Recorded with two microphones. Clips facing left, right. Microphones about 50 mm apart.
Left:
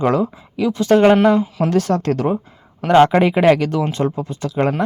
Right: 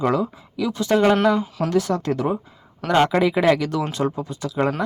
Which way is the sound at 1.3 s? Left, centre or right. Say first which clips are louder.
Left 5 dB; centre.